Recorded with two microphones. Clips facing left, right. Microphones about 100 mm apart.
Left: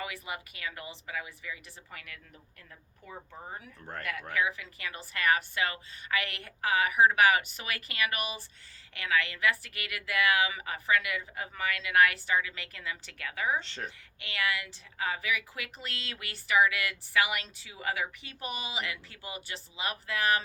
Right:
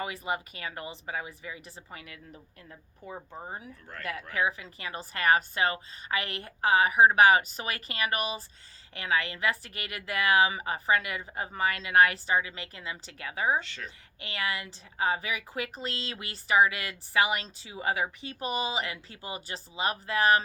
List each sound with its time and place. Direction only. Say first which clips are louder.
0.0 s a woman's voice: right 6 dB; 35° right (ahead or behind)
3.9 s speech: left 4 dB; 35° left (ahead or behind)
4.4 s a woman's voice: right 2 dB; 30° right (ahead or behind)
13.7 s speech: left 2 dB; 30° left (ahead or behind)
14.2 s a woman's voice: even; 35° right (ahead or behind)